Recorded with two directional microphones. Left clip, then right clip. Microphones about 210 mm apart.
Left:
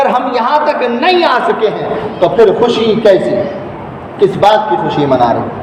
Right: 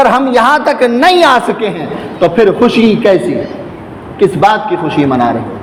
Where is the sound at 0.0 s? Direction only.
55° right (ahead or behind).